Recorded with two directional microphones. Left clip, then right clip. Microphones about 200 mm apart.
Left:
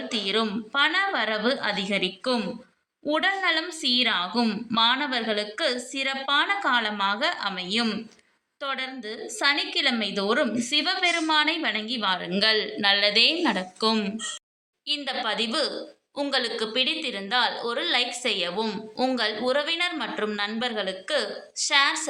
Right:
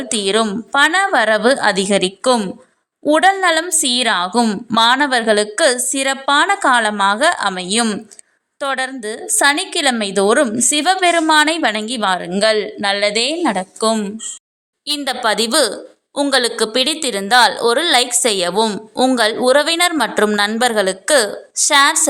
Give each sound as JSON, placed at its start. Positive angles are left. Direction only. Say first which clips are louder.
{"t": 0.1, "sound": "a woman's voice", "louder": "right 10 dB", "side_deg": -55}
{"t": 14.8, "sound": "a woman's voice", "louder": "right 10 dB", "side_deg": -55}